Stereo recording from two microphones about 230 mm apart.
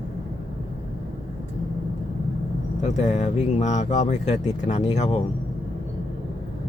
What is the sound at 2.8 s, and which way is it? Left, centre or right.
Speech, left.